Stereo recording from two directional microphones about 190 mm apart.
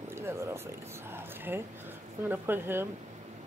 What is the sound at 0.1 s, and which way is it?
Speech, 15° right (ahead or behind).